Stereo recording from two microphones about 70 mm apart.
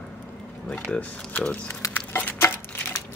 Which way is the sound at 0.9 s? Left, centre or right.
Centre.